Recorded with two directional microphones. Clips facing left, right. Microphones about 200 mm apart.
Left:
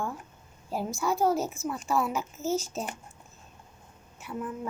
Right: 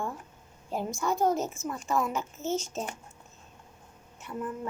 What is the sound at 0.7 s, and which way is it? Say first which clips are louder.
A woman's voice: left 1 dB; 5° left (ahead or behind).